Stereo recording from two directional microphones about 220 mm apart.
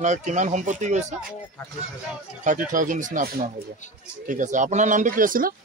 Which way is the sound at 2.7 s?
35° right (ahead or behind).